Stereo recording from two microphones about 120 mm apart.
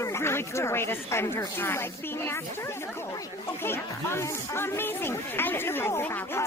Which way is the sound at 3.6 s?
20° left (ahead or behind).